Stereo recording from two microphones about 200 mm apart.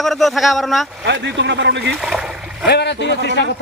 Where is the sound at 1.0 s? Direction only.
60° right (ahead or behind).